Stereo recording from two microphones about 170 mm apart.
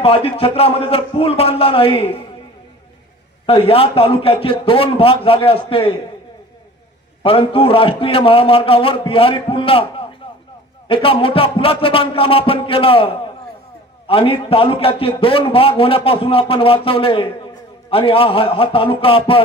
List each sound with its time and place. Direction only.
0.0 s a man's voice: 35° left (ahead or behind)
3.4 s a man's voice: 35° left (ahead or behind)
7.2 s a man's voice: 30° left (ahead or behind)